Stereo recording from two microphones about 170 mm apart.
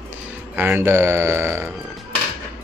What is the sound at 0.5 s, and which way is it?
A man's voice, 15° right (ahead or behind).